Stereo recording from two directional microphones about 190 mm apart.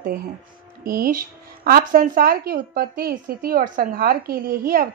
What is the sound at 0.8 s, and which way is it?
A woman's voice, 50° right (ahead or behind).